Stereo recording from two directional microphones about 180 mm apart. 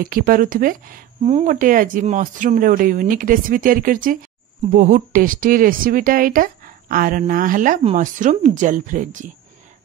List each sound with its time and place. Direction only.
0.0 s speech: 50° right (ahead or behind)